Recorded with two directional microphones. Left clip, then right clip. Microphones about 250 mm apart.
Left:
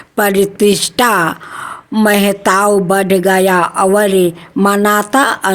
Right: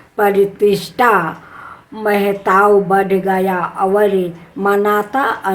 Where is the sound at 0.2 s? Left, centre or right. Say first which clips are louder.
Left 1 dB; left.